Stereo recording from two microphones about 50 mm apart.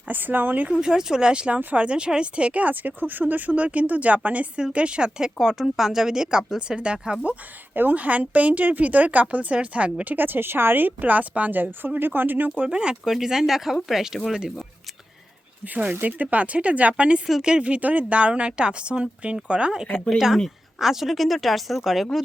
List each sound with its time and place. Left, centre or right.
0.1 s a woman's voice: right
0.7 s a woman's voice: centre
7.7 s a woman's voice: right
12.5 s speech: centre
13.1 s a woman's voice: centre
16.0 s speech: right; by 19.9 s centre
20.1 s a woman's voice: centre